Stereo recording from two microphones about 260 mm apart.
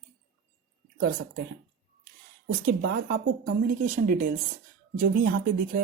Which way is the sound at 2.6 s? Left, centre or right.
Right.